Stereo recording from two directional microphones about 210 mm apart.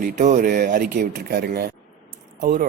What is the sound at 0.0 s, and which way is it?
Speech, 40° right (ahead or behind).